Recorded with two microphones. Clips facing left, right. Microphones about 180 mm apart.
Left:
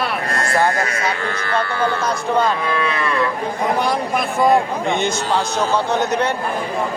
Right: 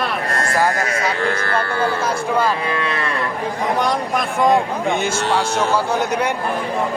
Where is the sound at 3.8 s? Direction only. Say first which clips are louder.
Even; 5° left (ahead or behind).